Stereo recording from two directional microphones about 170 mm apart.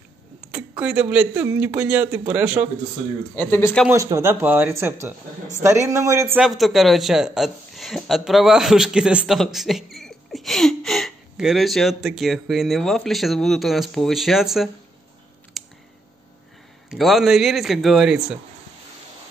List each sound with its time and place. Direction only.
0.5 s speech: 5° right (ahead or behind)
3.3 s speech: 10° left (ahead or behind)
3.9 s speech: 15° right (ahead or behind)
6.4 s a man's voice: centre (ahead or behind)
15.6 s a sound: centre (ahead or behind)
16.9 s a man's voice: centre (ahead or behind)